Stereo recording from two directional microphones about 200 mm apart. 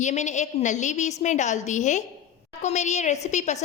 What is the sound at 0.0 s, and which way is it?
A woman's voice, 35° left (ahead or behind).